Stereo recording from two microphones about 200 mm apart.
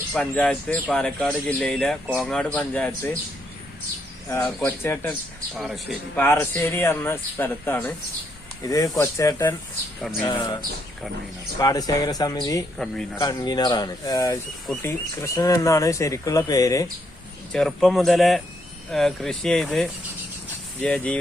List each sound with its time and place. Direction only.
0.1 s speech: 5° left (ahead or behind)
4.3 s speech: 10° left (ahead or behind)
5.5 s speech: centre (ahead or behind)
6.1 s speech: 10° left (ahead or behind)
10.0 s speech: centre (ahead or behind)
10.3 s speech: 20° left (ahead or behind)
11.6 s speech: 20° left (ahead or behind)
12.8 s speech: centre (ahead or behind)
13.1 s speech: 20° left (ahead or behind)
17.5 s speech: centre (ahead or behind)